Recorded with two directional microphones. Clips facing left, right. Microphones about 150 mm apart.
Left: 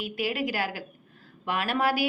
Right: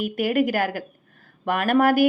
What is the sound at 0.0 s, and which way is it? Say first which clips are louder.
Speech: right 8 dB; 50° right (ahead or behind).